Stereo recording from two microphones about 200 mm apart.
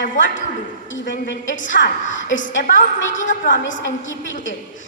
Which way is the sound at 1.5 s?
70° left (ahead or behind).